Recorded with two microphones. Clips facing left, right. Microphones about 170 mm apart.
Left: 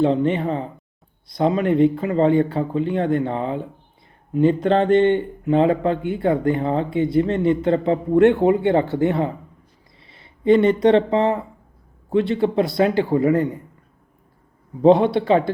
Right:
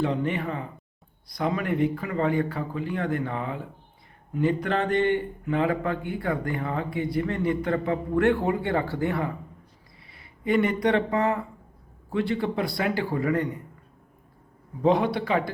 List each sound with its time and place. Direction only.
0.0 s speech: 25° left (ahead or behind)
14.8 s speech: 25° left (ahead or behind)